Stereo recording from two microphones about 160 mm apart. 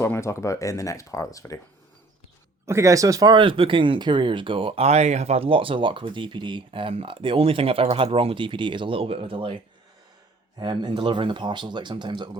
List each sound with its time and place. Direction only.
0.0 s speech: 15° left (ahead or behind)
2.6 s speech: 20° right (ahead or behind)
10.6 s speech: 30° right (ahead or behind)